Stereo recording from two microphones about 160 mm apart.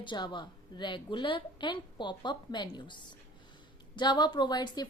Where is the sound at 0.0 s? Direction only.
30° left (ahead or behind).